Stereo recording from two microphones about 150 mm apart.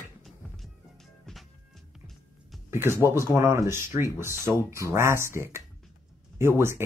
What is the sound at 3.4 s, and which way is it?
Speech, 20° right (ahead or behind).